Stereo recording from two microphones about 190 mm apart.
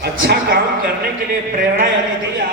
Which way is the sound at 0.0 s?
60° right (ahead or behind).